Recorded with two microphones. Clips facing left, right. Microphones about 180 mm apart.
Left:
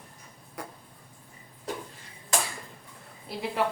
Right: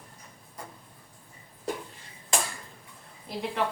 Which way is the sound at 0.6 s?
70° left (ahead or behind).